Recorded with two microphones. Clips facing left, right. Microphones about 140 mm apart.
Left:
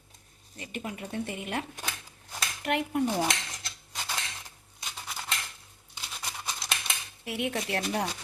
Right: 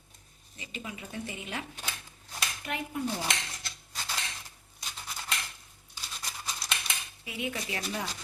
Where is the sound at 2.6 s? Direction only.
70° left (ahead or behind).